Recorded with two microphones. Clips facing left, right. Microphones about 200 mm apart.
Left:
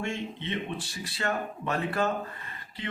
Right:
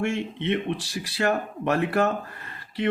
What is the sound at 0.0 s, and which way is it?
Speech, 70° right (ahead or behind).